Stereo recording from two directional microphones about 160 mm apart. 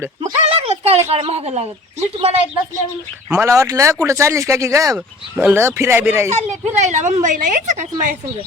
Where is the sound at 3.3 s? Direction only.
20° right (ahead or behind).